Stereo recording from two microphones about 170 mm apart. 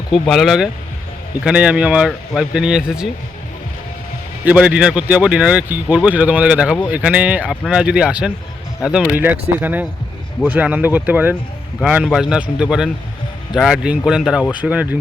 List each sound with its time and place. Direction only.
0.1 s speech: centre (ahead or behind)
4.4 s speech: 5° right (ahead or behind)